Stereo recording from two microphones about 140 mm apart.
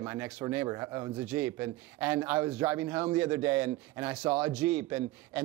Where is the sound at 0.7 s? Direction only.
20° right (ahead or behind).